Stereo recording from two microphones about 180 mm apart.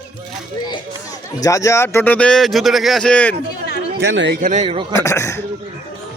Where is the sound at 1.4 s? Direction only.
20° left (ahead or behind).